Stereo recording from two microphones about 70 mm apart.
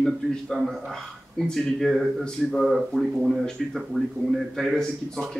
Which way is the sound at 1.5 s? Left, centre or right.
Centre.